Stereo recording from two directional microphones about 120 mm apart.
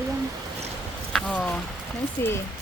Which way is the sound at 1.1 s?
10° left (ahead or behind).